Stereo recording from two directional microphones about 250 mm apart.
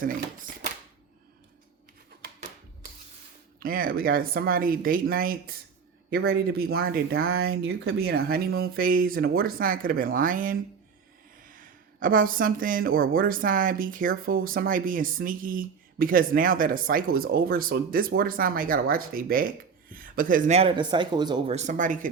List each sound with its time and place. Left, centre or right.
0.0 s speech: right
3.6 s speech: right